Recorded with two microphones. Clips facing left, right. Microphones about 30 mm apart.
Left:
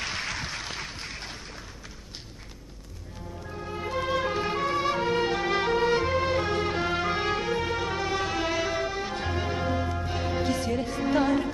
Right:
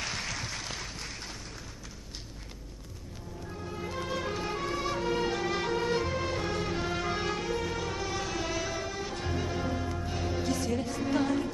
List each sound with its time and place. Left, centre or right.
0.0 s applause: left
3.4 s music: left